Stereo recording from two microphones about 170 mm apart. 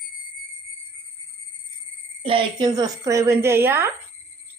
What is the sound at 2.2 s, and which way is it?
Speech, 30° right (ahead or behind).